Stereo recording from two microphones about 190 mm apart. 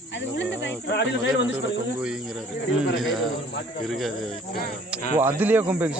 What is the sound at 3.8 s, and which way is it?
Speech, centre (ahead or behind).